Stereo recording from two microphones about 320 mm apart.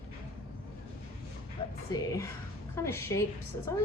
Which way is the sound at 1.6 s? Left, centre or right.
Centre.